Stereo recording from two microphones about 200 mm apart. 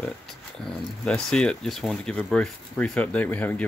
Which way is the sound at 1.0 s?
5° left (ahead or behind).